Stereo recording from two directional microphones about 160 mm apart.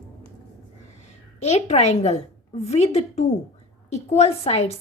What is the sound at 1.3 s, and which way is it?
A woman's voice, 45° left (ahead or behind).